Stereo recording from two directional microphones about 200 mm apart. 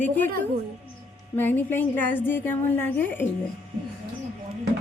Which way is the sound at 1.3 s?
10° left (ahead or behind).